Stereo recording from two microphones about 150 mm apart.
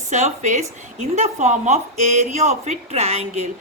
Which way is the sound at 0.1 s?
50° right (ahead or behind).